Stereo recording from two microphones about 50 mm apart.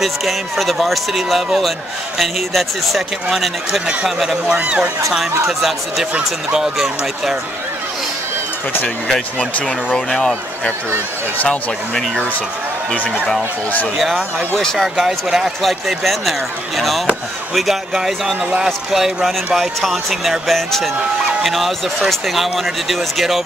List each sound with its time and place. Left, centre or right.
0.0 s speech: centre
4.6 s speech: right
5.6 s speech: centre
9.9 s speech: centre
13.0 s speech: right
13.9 s speech: centre
14.6 s speech: centre
15.3 s speech: centre